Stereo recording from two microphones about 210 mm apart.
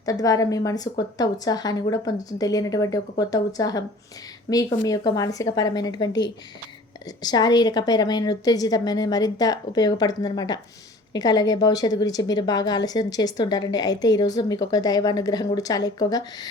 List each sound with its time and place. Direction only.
0.0 s a woman's voice: 15° left (ahead or behind)
4.9 s a woman's voice: 15° left (ahead or behind)
7.2 s a woman's voice: 20° left (ahead or behind)